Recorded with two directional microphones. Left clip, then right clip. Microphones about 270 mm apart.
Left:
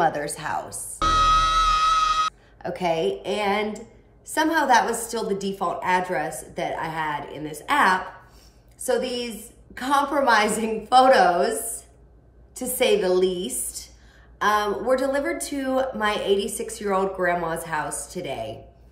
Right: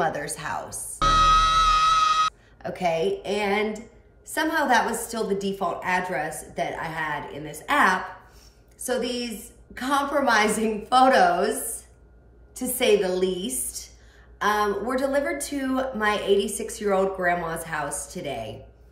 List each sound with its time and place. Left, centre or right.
0.0 s music: centre
4.3 s a woman's voice: centre
12.5 s a woman's voice: centre